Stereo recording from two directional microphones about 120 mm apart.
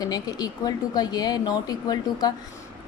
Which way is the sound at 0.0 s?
30° left (ahead or behind).